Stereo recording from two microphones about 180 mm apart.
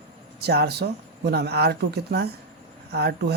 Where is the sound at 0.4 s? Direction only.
60° right (ahead or behind).